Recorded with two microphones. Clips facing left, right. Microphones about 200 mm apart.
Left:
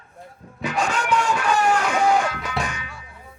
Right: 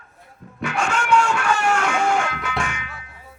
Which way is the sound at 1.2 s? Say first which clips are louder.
Even; 20° left (ahead or behind).